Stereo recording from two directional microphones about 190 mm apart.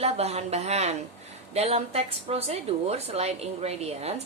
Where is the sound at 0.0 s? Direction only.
35° right (ahead or behind).